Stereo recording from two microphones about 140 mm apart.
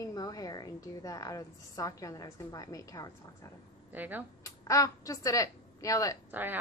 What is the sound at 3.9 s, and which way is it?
Speech, 10° right (ahead or behind).